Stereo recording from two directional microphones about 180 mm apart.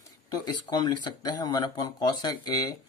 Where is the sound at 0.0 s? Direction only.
20° left (ahead or behind).